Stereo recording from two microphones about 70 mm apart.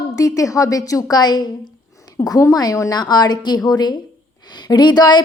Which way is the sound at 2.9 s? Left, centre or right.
Left.